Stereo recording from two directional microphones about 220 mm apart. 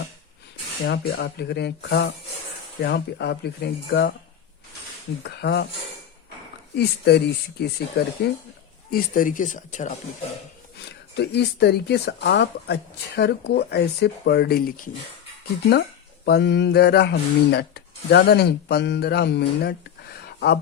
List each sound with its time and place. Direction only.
0.9 s speech: 45° left (ahead or behind)
5.2 s speech: 50° left (ahead or behind)
6.7 s speech: 50° left (ahead or behind)
10.8 s speech: 50° left (ahead or behind)
16.2 s speech: 50° left (ahead or behind)